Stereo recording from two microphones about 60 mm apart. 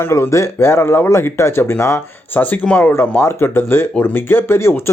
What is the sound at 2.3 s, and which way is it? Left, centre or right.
Speech, left.